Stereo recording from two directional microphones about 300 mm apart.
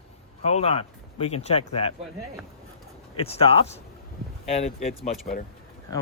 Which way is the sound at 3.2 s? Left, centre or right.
Centre.